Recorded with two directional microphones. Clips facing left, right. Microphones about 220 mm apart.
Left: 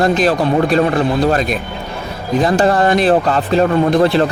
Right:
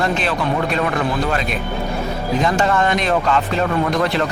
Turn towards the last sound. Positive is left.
turn(degrees=30)  # may be behind; listen again after turning